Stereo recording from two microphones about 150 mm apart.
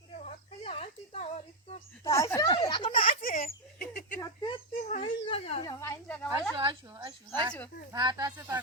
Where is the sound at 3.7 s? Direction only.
70° left (ahead or behind).